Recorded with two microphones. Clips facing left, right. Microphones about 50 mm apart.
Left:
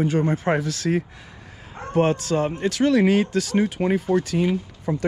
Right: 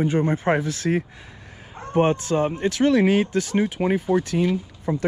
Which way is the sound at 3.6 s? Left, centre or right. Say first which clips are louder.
Even; centre.